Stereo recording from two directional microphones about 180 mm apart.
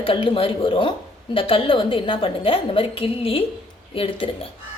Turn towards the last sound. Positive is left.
turn(degrees=30)  # may be behind; listen again after turning